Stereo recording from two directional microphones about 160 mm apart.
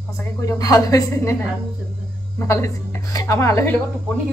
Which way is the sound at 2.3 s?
20° left (ahead or behind).